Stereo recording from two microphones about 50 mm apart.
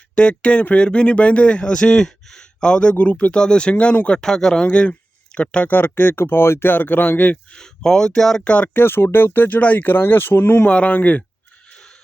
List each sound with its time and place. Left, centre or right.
0.2 s a man's voice: left
4.2 s speech: centre
4.6 s speech: left
5.7 s speech: left
7.5 s speech: centre
8.4 s a man's voice: left
8.7 s speech: left
10.7 s a man's voice: left